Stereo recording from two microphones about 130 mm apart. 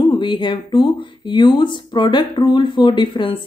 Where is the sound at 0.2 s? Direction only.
40° left (ahead or behind).